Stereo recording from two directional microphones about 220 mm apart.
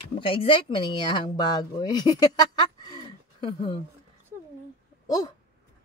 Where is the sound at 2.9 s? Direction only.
25° left (ahead or behind).